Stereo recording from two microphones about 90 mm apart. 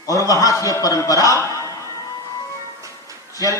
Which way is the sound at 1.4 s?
35° left (ahead or behind).